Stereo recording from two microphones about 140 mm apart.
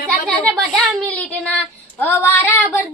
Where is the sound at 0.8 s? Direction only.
5° left (ahead or behind).